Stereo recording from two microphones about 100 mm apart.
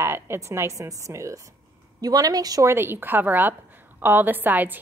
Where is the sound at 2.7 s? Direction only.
25° right (ahead or behind).